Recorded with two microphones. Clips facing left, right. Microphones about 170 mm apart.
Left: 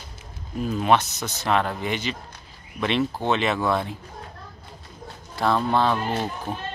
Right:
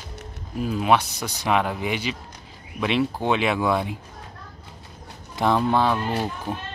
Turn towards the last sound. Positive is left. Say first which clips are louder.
# right 1 dB
turn(degrees=-10)  # may be behind; listen again after turning